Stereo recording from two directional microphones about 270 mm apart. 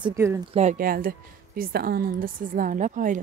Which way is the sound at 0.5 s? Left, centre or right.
Right.